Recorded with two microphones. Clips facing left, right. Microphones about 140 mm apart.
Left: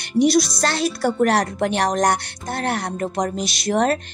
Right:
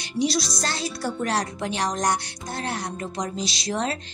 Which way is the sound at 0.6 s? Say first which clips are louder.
Left 8 dB; 65° left (ahead or behind).